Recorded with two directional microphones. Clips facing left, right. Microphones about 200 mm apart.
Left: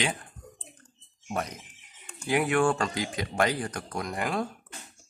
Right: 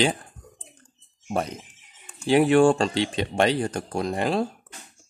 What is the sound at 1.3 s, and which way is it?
A man's voice, 30° right (ahead or behind).